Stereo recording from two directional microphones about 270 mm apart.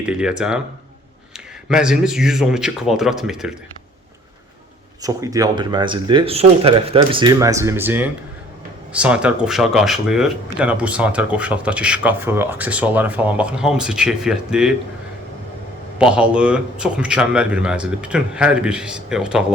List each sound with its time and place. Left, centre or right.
0.0 s speech: centre
1.7 s speech: centre
5.0 s speech: centre
16.0 s speech: centre